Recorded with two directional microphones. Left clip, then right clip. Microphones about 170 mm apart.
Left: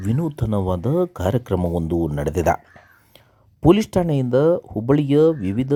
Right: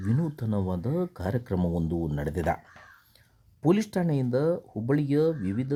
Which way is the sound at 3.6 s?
25° left (ahead or behind).